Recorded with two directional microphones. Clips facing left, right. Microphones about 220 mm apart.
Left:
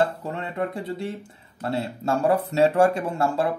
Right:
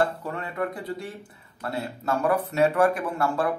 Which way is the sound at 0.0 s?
25° left (ahead or behind).